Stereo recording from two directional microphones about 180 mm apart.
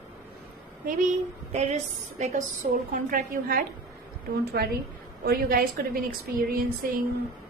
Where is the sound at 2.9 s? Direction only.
50° right (ahead or behind).